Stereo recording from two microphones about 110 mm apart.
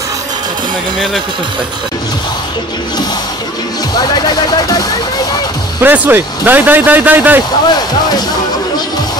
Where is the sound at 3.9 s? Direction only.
40° left (ahead or behind).